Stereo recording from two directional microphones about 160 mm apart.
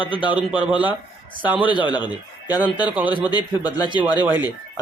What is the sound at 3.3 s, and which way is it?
Speech, 25° left (ahead or behind).